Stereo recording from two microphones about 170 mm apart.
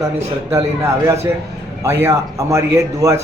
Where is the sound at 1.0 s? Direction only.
15° right (ahead or behind).